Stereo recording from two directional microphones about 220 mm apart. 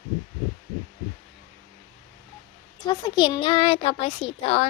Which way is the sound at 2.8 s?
20° left (ahead or behind).